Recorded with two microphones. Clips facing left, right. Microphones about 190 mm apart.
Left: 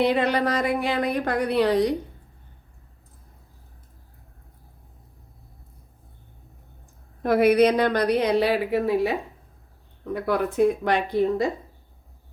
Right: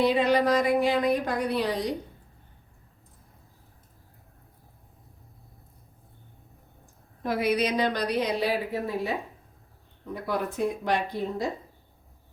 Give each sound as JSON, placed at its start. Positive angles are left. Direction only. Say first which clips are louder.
{"t": 0.0, "sound": "speech", "louder": "left 1 dB", "side_deg": 65}
{"t": 7.2, "sound": "speech", "louder": "left 8 dB", "side_deg": 60}
{"t": 10.2, "sound": "speech", "louder": "left 7 dB", "side_deg": 65}